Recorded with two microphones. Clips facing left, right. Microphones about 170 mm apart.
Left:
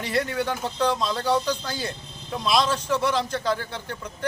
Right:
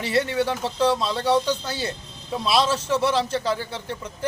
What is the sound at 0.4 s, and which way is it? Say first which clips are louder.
Speech: right 3 dB; centre (ahead or behind).